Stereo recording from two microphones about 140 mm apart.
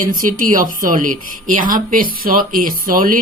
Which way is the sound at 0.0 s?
75° right (ahead or behind).